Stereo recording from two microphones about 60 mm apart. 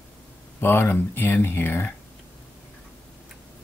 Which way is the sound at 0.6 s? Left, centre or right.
Left.